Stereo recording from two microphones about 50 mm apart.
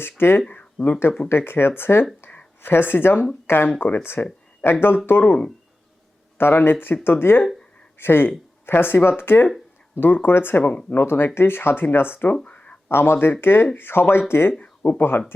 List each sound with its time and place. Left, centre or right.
0.0 s speech: left
6.3 s speech: left
10.6 s speech: left
10.9 s speech: left
12.5 s a sound: left
12.9 s speech: left
14.6 s speech: left